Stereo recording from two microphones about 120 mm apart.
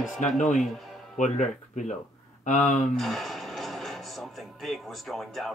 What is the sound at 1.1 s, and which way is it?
Speech, 90° left.